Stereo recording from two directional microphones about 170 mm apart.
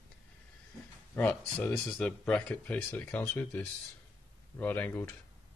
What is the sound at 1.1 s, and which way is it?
Speech, 10° left (ahead or behind).